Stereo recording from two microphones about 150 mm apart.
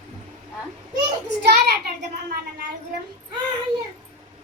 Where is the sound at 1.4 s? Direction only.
90° right.